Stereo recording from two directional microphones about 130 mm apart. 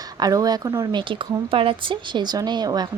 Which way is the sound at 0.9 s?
40° right (ahead or behind).